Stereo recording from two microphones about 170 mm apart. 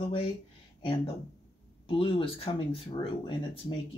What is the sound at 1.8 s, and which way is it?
Speech, 30° left (ahead or behind).